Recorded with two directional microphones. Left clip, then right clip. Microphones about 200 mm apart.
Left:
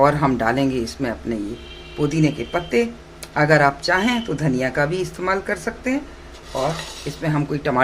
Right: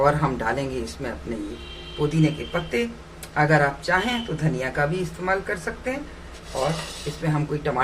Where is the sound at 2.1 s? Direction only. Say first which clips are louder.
Left 4 dB; 50° left (ahead or behind).